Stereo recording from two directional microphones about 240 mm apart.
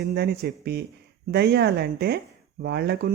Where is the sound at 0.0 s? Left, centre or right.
Right.